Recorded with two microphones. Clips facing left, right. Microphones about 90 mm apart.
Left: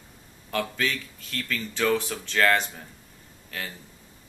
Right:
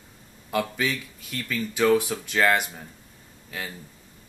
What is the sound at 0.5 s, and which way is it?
Speech, 10° right (ahead or behind).